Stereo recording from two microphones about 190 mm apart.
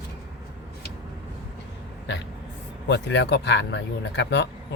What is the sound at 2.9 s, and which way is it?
Speech, 65° left (ahead or behind).